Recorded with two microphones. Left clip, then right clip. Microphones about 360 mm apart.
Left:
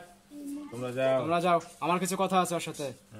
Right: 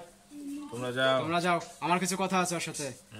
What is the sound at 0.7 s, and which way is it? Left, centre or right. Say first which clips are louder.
Speech: right 1 dB; right.